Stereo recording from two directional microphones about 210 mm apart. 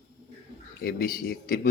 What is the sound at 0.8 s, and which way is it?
Speech, 45° left (ahead or behind).